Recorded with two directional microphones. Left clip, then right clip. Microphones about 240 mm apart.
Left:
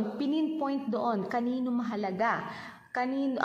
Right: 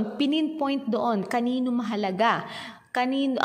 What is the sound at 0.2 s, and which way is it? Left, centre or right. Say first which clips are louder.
A woman's voice: right 5 dB; right.